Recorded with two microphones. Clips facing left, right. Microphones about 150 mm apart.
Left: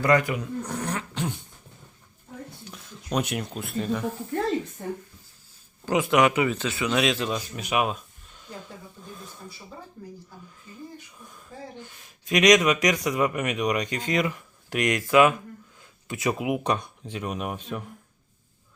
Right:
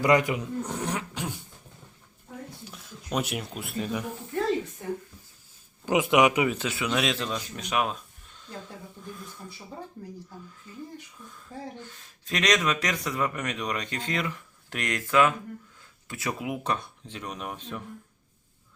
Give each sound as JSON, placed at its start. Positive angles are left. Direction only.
{"t": 0.0, "sound": "dog", "side_deg": -20}
{"t": 2.6, "sound": "speech", "side_deg": -5}
{"t": 5.8, "sound": "a man's voice", "side_deg": -15}
{"t": 11.3, "sound": "speech", "side_deg": 15}